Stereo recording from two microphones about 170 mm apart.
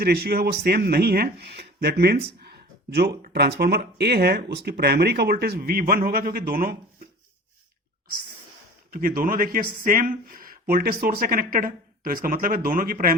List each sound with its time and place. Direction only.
0.0 s speech: 70° right (ahead or behind)
8.9 s speech: 55° right (ahead or behind)